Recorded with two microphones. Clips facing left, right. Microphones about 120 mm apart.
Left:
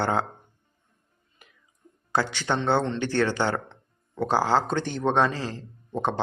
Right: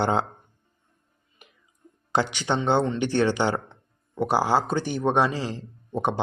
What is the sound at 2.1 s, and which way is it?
Speech, 15° right (ahead or behind).